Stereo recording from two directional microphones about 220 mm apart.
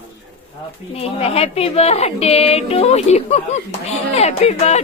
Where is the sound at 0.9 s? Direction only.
25° left (ahead or behind).